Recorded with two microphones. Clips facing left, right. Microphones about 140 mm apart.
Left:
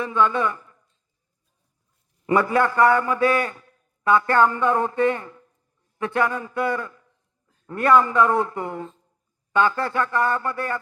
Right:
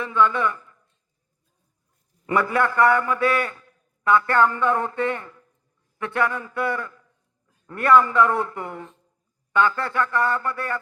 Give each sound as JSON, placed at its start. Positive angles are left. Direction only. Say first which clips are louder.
{"t": 0.0, "sound": "a man's voice", "louder": "even", "side_deg": 25}
{"t": 2.2, "sound": "a man's voice", "louder": "left 2 dB", "side_deg": 25}